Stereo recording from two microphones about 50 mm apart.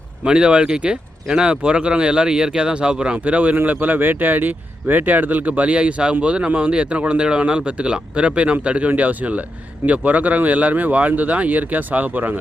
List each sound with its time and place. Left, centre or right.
0.3 s speech: centre; by 12.4 s right